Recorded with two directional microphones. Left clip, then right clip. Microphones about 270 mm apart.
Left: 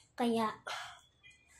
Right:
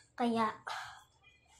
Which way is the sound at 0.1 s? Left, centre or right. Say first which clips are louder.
Even; centre.